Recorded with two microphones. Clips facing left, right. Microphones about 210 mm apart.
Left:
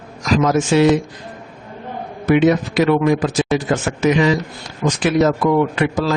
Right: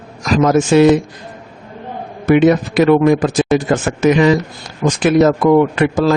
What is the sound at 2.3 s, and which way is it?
A man's voice, 50° right (ahead or behind).